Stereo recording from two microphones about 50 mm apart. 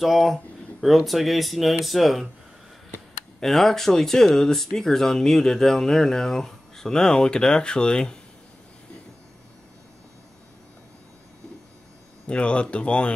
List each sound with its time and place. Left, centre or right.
0.0 s speech: centre
3.3 s speech: centre
12.3 s speech: left